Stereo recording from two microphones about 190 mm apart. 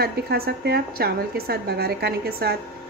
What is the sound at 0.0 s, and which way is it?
Speech, 55° right (ahead or behind).